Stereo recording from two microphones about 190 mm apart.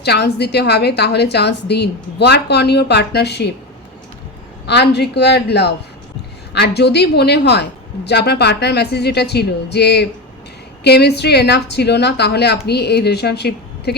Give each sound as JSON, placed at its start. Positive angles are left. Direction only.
{"t": 0.0, "sound": "a woman's voice", "side_deg": 60}
{"t": 4.6, "sound": "a woman's voice", "side_deg": 60}